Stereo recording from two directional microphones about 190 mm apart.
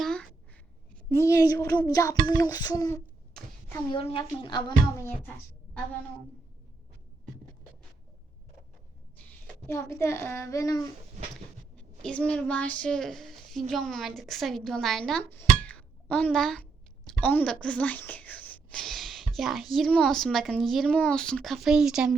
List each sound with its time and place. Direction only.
0.0 s a sound: 5° left (ahead or behind)
1.1 s a woman's voice: 15° left (ahead or behind)
3.9 s speech: 25° left (ahead or behind)
9.6 s a woman's voice: 15° left (ahead or behind)
11.8 s speech: 5° left (ahead or behind)
15.4 s a sound: 10° left (ahead or behind)
17.2 s speech: 5° left (ahead or behind)